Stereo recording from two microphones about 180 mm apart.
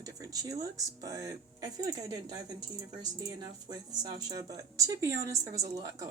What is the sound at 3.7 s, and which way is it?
Speech, 20° right (ahead or behind).